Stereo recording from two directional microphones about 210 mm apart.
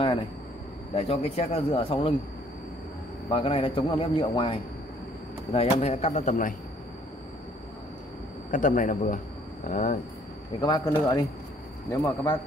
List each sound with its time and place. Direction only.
0.9 s a man's voice: 30° left (ahead or behind)
3.3 s a man's voice: 25° left (ahead or behind)
8.5 s a man's voice: 40° left (ahead or behind)
10.6 s a man's voice: 20° left (ahead or behind)